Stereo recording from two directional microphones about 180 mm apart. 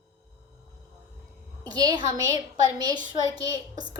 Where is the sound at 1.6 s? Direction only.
20° right (ahead or behind).